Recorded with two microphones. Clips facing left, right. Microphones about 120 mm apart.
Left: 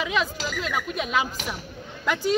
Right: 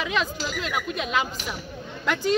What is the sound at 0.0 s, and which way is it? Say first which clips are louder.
Speech: left 1 dB; 5° left (ahead or behind).